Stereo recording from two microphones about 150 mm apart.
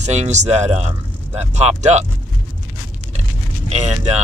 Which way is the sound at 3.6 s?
45° right (ahead or behind).